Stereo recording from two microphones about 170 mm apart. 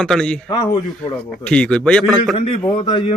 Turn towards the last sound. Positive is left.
turn(degrees=25)  # may be behind; listen again after turning